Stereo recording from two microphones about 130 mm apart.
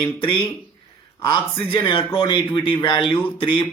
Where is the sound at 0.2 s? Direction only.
40° left (ahead or behind).